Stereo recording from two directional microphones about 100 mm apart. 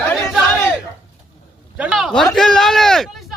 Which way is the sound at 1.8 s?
5° right (ahead or behind).